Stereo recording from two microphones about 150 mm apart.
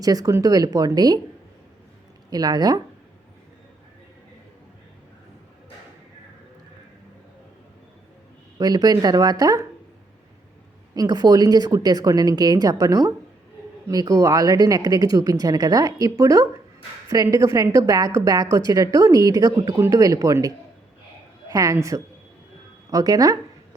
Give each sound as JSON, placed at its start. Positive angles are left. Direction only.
{"t": 0.0, "sound": "speech", "side_deg": -25}
{"t": 2.3, "sound": "speech", "side_deg": -25}
{"t": 8.5, "sound": "speech", "side_deg": -25}
{"t": 10.9, "sound": "speech", "side_deg": -25}
{"t": 21.5, "sound": "speech", "side_deg": -20}